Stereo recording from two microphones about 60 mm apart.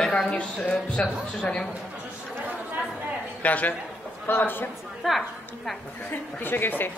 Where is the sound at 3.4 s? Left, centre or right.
Left.